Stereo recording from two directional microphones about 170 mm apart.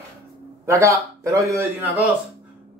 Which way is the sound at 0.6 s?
15° right (ahead or behind).